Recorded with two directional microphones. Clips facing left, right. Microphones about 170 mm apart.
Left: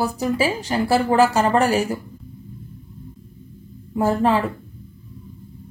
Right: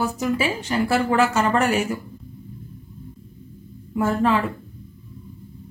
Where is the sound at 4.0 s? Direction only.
35° left (ahead or behind).